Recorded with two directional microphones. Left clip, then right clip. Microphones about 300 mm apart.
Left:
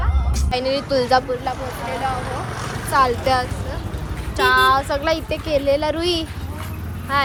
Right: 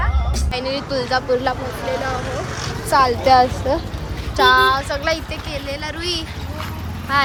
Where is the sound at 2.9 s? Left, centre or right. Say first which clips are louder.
Right 3 dB; centre.